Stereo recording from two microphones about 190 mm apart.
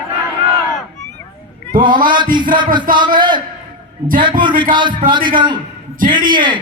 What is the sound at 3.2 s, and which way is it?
Speech, 25° right (ahead or behind).